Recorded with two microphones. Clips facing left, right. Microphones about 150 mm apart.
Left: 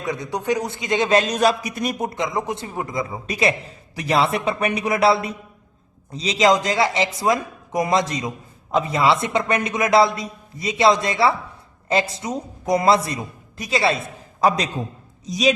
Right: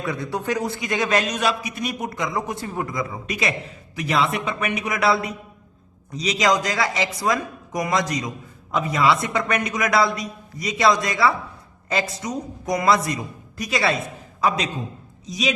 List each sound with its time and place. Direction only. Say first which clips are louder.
0.0 s speech: left 1 dB; 20° left (ahead or behind); by 2.0 s 45° left (ahead or behind)
2.0 s a man's voice: left 2 dB; 25° left (ahead or behind); by 15.5 s 40° left (ahead or behind)